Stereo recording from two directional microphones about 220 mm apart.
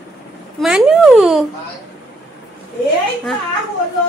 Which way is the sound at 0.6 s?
Centre (ahead or behind).